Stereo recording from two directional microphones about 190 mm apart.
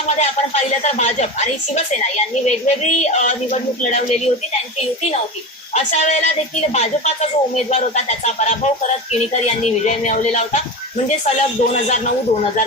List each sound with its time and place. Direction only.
0.2 s speech: 35° left (ahead or behind)
5.7 s speech: 35° left (ahead or behind)